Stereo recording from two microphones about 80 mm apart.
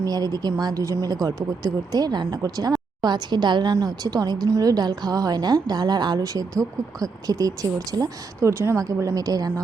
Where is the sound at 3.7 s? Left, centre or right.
Right.